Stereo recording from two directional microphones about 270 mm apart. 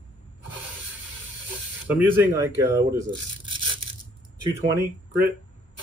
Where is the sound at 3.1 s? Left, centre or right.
Centre.